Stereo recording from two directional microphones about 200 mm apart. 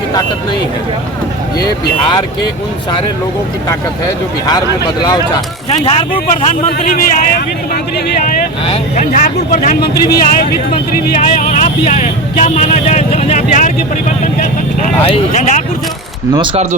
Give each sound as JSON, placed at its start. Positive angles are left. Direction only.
{"t": 5.6, "sound": "speech", "side_deg": 30}
{"t": 6.5, "sound": "a man's voice", "side_deg": 40}
{"t": 8.6, "sound": "speech", "side_deg": 30}
{"t": 9.1, "sound": "a man's voice", "side_deg": 40}
{"t": 10.9, "sound": "speech", "side_deg": 40}
{"t": 15.0, "sound": "speech", "side_deg": 30}